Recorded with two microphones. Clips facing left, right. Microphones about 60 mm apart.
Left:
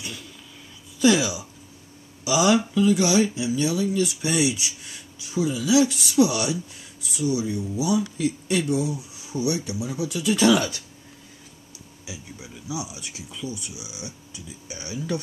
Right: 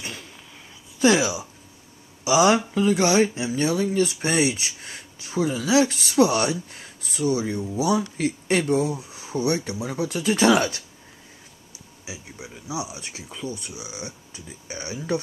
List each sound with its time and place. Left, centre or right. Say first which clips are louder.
0.0 s a sound: right 1 dB; right
2.2 s speech: right 2 dB; right
12.1 s speech: right 1 dB; right